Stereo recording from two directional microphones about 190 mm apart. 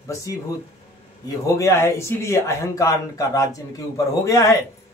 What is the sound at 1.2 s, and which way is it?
Speech, 15° left (ahead or behind).